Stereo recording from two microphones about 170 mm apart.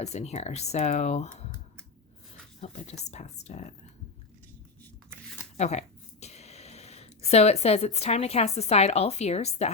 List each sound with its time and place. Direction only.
0.0 s speech: 40° left (ahead or behind)
2.6 s speech: 40° left (ahead or behind)
5.5 s speech: 40° left (ahead or behind)